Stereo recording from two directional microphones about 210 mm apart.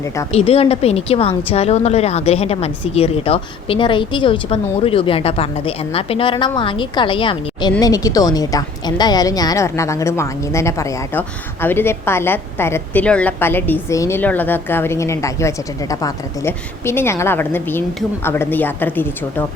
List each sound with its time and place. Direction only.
0.3 s a woman's voice: 30° left (ahead or behind); by 19.5 s 10° left (ahead or behind)